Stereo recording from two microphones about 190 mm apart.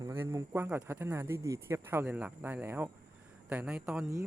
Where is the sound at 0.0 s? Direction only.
15° right (ahead or behind).